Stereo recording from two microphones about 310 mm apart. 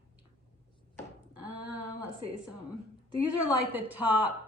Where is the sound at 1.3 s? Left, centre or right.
Right.